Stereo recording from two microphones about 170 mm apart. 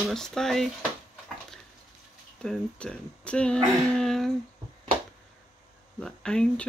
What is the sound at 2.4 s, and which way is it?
Speech, 5° left (ahead or behind).